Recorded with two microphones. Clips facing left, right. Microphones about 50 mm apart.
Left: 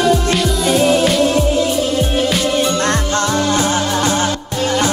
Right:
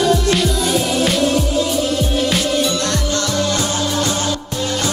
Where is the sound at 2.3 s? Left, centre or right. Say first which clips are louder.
Left 1 dB; centre.